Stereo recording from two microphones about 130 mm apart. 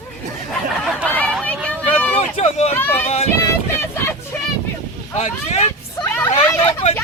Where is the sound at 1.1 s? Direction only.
10° left (ahead or behind).